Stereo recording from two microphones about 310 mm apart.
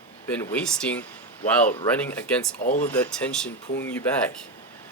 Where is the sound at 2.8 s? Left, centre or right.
Centre.